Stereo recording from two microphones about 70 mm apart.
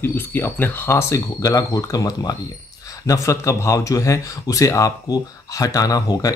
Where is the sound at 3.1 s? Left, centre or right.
Left.